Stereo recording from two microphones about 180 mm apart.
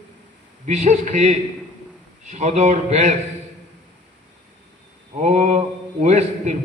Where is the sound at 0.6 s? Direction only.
40° right (ahead or behind).